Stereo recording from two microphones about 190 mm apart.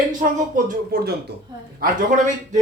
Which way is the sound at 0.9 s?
50° right (ahead or behind).